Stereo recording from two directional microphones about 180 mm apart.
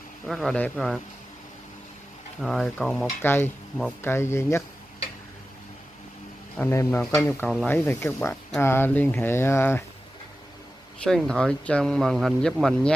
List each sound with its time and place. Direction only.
0.3 s speech: centre (ahead or behind)
2.4 s speech: centre (ahead or behind)
3.2 s speech: 10° left (ahead or behind)
6.5 s speech: 15° left (ahead or behind)
11.0 s speech: 5° left (ahead or behind)